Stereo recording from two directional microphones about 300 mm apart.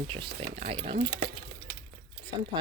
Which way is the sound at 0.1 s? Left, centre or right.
Centre.